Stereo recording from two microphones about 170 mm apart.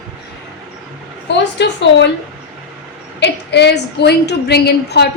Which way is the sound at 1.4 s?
90° left.